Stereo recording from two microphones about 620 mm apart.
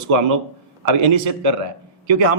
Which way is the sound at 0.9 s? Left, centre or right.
Right.